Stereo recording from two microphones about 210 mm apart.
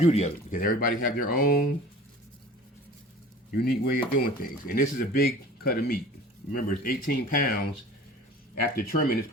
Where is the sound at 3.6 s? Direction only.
45° left (ahead or behind).